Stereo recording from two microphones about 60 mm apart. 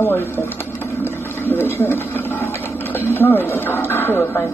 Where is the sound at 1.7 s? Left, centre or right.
Left.